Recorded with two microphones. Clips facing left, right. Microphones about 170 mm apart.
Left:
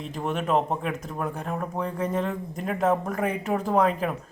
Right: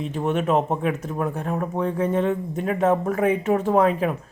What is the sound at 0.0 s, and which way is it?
Speech, centre (ahead or behind).